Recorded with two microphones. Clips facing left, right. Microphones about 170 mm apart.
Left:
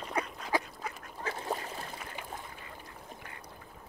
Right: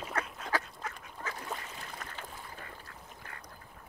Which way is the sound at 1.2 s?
35° left (ahead or behind).